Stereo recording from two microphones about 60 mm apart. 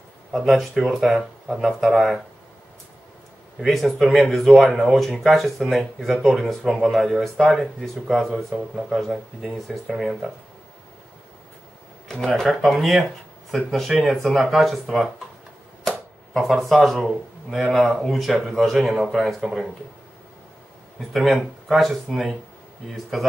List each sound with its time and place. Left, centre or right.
0.5 s speech: centre
3.5 s speech: centre
12.6 s speech: centre
16.3 s speech: centre
21.1 s speech: centre